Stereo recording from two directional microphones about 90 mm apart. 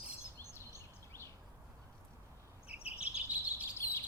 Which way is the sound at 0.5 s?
30° left (ahead or behind).